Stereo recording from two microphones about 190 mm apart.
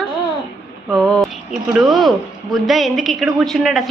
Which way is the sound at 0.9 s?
5° left (ahead or behind).